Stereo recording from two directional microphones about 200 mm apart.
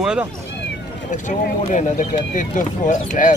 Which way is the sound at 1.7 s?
40° left (ahead or behind).